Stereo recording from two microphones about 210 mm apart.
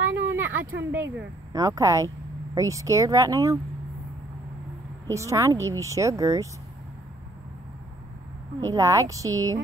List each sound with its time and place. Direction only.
0.1 s a sound: 70° right (ahead or behind)
0.9 s speech: 15° right (ahead or behind)
5.0 s speech: 15° right (ahead or behind)
8.5 s speech: 15° right (ahead or behind)